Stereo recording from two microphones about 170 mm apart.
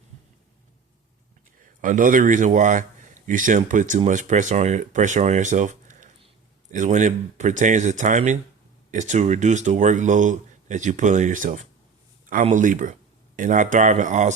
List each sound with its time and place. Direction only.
1.8 s speech: 50° right (ahead or behind)